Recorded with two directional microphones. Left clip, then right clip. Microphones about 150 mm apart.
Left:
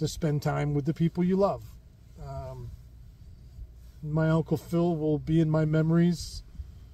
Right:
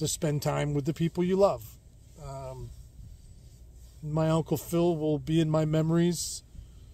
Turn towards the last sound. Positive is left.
turn(degrees=-20)  # may be behind; listen again after turning